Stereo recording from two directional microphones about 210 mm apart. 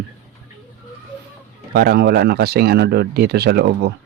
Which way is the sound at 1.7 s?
45° right (ahead or behind).